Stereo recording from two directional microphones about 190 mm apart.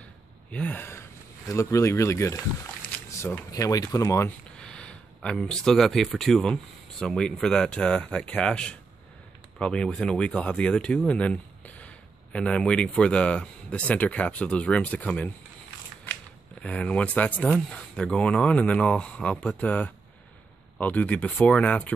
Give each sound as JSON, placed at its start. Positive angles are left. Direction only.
{"t": 0.5, "sound": "speech", "side_deg": 5}
{"t": 4.6, "sound": "speech", "side_deg": 5}
{"t": 16.6, "sound": "speech", "side_deg": 5}